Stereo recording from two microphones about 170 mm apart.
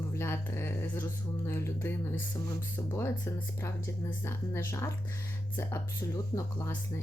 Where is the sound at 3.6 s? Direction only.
15° left (ahead or behind).